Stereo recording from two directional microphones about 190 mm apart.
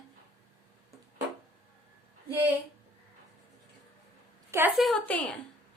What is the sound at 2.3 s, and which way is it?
Speech, 10° right (ahead or behind).